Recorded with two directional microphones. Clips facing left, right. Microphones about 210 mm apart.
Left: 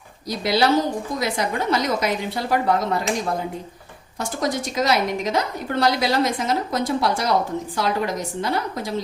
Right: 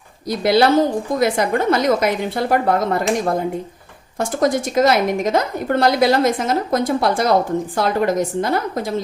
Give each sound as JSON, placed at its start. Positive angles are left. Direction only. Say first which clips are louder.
{"t": 0.3, "sound": "a woman's voice", "louder": "right 5 dB", "side_deg": -55}
{"t": 4.2, "sound": "a woman's voice", "louder": "right 6 dB", "side_deg": -50}